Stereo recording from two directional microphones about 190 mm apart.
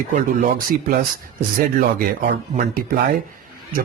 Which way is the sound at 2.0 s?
45° right (ahead or behind).